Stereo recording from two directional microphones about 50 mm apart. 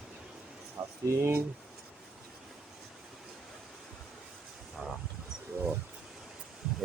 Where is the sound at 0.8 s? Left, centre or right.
Right.